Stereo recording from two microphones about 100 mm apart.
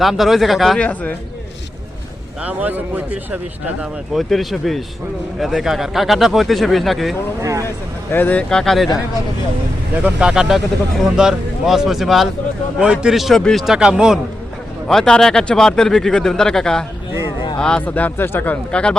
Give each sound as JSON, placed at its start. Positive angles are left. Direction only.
{"t": 0.0, "sound": "speech", "side_deg": 0}
{"t": 0.8, "sound": "speech", "side_deg": 15}
{"t": 2.4, "sound": "speech", "side_deg": -15}
{"t": 3.8, "sound": "speech", "side_deg": 0}
{"t": 7.4, "sound": "speech", "side_deg": -30}
{"t": 8.1, "sound": "speech", "side_deg": 15}
{"t": 9.9, "sound": "speech", "side_deg": -10}
{"t": 14.8, "sound": "speech", "side_deg": 5}